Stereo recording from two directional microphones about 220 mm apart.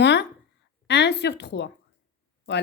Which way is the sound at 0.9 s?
50° left (ahead or behind).